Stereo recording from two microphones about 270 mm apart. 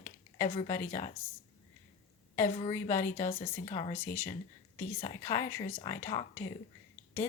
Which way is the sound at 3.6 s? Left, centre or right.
Left.